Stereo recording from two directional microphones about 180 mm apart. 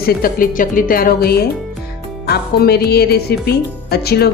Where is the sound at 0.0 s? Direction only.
55° left (ahead or behind).